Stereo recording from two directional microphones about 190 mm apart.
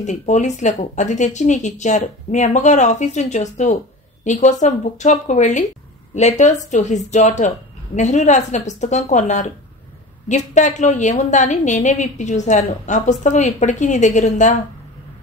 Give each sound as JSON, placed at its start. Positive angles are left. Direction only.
{"t": 0.0, "sound": "a woman's voice", "side_deg": 40}